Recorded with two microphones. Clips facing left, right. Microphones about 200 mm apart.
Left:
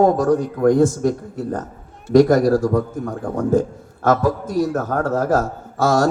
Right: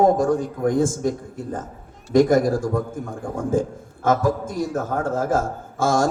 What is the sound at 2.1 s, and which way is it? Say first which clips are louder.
Speech: left 4 dB; 50° right (ahead or behind).